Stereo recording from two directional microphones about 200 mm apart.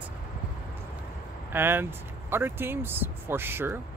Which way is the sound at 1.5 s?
10° right (ahead or behind).